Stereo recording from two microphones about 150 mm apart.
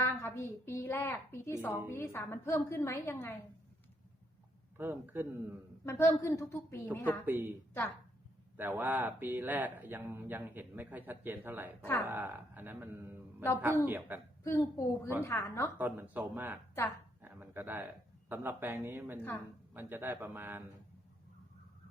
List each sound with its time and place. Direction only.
0.0 s a woman's voice: 15° left (ahead or behind)
4.8 s speech: 15° right (ahead or behind)
5.8 s a woman's voice: 15° left (ahead or behind)
7.3 s speech: 15° right (ahead or behind)
8.5 s speech: 15° right (ahead or behind)
11.8 s a woman's voice: 15° left (ahead or behind)
12.0 s speech: 15° right (ahead or behind)
14.4 s a woman's voice: 20° left (ahead or behind)
15.8 s speech: 10° right (ahead or behind)
17.2 s a sound: 15° right (ahead or behind)
18.3 s speech: 10° right (ahead or behind)